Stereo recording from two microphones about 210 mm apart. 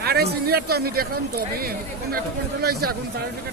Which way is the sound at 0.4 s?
45° right (ahead or behind).